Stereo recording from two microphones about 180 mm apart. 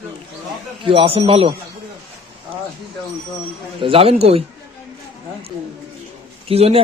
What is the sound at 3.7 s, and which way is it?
Speech, 30° right (ahead or behind).